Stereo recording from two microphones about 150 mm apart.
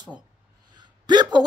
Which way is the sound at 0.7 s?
30° right (ahead or behind).